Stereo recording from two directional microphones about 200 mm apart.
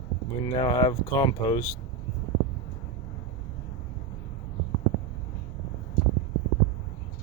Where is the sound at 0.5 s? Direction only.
20° left (ahead or behind).